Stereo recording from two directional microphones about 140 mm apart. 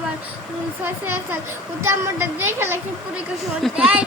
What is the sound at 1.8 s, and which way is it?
Speech, 20° right (ahead or behind).